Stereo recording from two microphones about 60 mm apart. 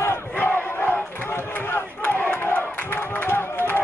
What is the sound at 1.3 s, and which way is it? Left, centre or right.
Crowd, left.